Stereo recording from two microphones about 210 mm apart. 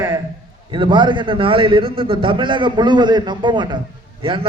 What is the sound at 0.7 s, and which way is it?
A man's voice, 25° right (ahead or behind).